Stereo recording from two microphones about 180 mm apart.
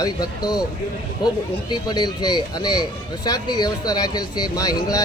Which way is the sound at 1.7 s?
25° left (ahead or behind).